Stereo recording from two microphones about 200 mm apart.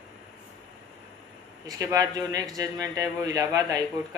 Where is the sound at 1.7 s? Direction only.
15° right (ahead or behind).